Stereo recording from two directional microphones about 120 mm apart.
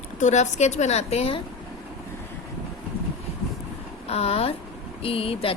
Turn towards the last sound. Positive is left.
turn(degrees=50)  # may be behind; listen again after turning